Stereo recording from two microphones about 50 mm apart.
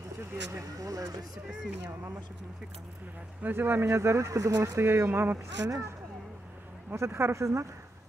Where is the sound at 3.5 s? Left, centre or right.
Right.